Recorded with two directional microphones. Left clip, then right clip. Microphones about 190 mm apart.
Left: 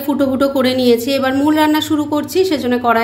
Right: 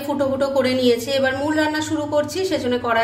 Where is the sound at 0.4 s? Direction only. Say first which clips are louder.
Left 3 dB; 45° left (ahead or behind).